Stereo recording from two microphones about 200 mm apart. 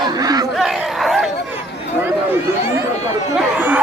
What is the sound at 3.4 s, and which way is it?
Chatter, 10° right (ahead or behind).